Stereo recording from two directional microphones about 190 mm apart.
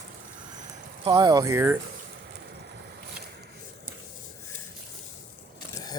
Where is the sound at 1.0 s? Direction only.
25° right (ahead or behind).